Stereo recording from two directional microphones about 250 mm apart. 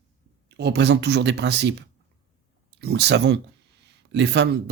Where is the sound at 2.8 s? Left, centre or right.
Right.